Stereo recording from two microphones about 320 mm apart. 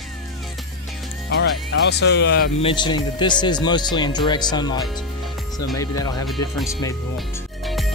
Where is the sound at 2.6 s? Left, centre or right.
Centre.